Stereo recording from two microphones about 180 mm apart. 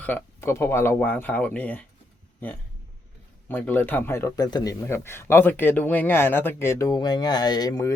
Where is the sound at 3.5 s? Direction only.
10° left (ahead or behind).